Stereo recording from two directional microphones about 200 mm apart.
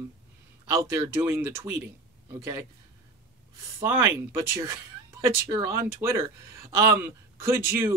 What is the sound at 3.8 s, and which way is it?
Speech, 10° right (ahead or behind).